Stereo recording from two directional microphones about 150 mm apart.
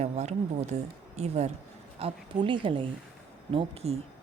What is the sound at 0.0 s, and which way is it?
A woman's voice, 50° right (ahead or behind).